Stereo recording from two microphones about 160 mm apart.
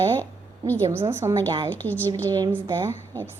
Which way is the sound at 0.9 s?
15° right (ahead or behind).